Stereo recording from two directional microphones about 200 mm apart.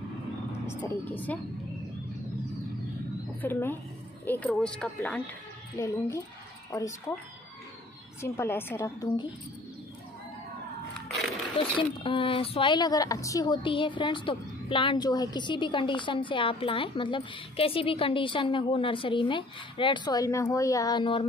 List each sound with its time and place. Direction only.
0.7 s speech: 10° left (ahead or behind)
3.3 s speech: 10° left (ahead or behind)
8.2 s speech: 10° left (ahead or behind)
11.5 s speech: 25° left (ahead or behind)